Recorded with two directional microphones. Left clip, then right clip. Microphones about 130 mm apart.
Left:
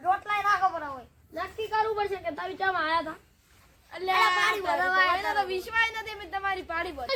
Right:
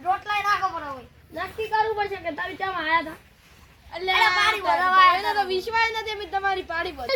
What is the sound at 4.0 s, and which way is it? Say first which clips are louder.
Speech: right 4 dB; 20° left (ahead or behind).